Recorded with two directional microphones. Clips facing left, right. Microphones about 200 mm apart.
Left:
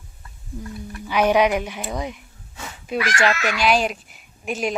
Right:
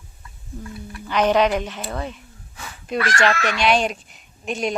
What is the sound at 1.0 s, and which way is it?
A woman's voice, 10° left (ahead or behind).